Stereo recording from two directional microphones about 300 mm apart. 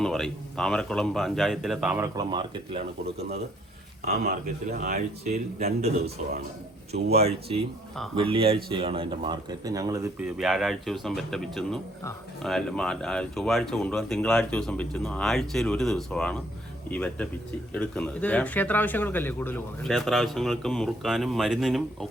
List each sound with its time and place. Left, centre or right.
0.0 s speech: centre
4.0 s speech: right
7.3 s speech: centre